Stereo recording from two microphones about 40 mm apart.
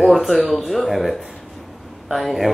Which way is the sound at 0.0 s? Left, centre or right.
Centre.